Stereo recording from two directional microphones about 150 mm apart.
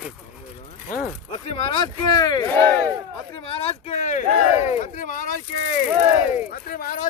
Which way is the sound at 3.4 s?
40° left (ahead or behind).